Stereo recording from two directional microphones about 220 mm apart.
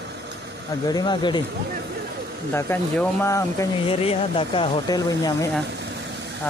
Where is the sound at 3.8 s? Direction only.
25° left (ahead or behind).